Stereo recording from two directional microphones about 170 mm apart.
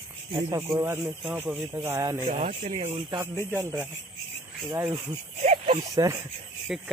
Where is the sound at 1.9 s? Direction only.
25° right (ahead or behind).